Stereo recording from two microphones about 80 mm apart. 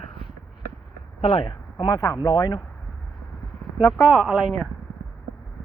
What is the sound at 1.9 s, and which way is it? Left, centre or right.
Speech, left.